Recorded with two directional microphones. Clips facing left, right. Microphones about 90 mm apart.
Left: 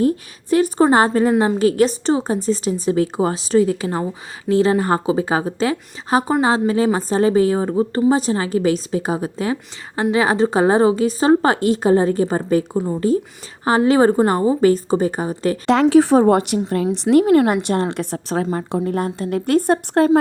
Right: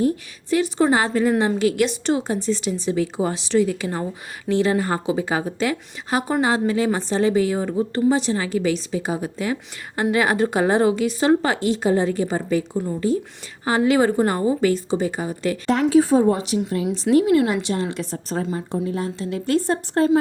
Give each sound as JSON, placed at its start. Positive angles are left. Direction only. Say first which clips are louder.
{"t": 0.5, "sound": "a woman's voice", "louder": "left 4 dB", "side_deg": 45}
{"t": 15.6, "sound": "a woman's voice", "louder": "left 4 dB", "side_deg": 90}
{"t": 17.2, "sound": "a woman's voice", "louder": "left 4 dB", "side_deg": 45}